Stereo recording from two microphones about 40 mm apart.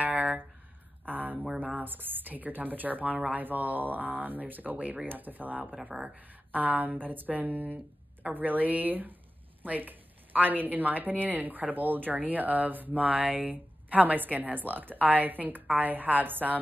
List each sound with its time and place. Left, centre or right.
0.0 s a sound: right
1.6 s a woman's voice: right
5.9 s a woman's voice: right